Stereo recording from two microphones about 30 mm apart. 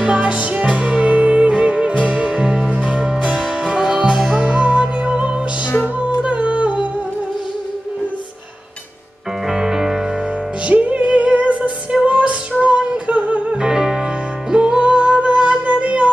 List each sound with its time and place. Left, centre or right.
0.0 s music: right
3.3 s music: right
5.9 s humming: right
9.5 s music: centre
10.7 s music: right
13.6 s music: right
14.5 s music: right
15.6 s music: right